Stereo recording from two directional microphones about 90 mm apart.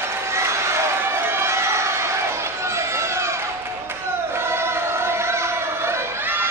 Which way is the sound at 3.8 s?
30° right (ahead or behind).